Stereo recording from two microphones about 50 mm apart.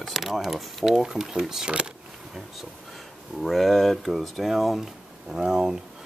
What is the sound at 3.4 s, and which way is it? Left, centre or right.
Speech, centre.